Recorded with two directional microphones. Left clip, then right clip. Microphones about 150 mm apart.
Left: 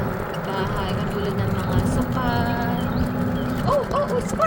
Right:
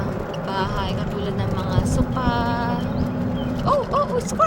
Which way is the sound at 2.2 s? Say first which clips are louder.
Right 2 dB; 25° right (ahead or behind).